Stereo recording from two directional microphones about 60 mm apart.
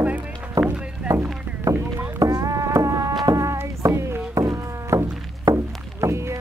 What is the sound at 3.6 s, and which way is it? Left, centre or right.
Music, right.